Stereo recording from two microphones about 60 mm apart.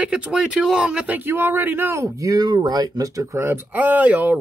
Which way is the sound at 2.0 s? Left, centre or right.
Right.